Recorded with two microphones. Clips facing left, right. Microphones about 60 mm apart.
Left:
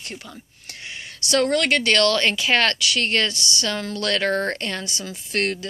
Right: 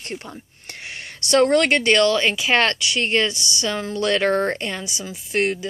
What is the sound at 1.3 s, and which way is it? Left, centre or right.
Speech, right.